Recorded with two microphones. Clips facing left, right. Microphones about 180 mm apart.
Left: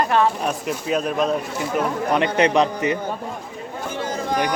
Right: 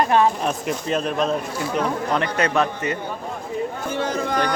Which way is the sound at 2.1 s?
20° left (ahead or behind).